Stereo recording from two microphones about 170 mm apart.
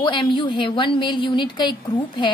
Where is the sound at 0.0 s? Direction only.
30° left (ahead or behind).